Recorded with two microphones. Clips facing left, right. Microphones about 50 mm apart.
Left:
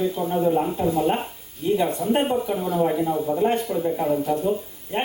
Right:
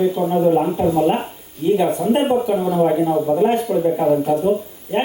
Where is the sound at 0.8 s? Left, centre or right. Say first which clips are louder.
Right 5 dB; right.